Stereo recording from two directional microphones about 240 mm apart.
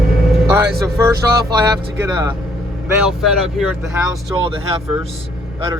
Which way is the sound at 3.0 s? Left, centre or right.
Centre.